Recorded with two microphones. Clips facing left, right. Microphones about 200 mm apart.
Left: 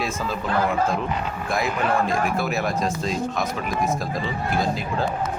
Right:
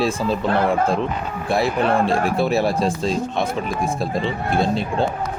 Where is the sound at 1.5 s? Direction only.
30° right (ahead or behind).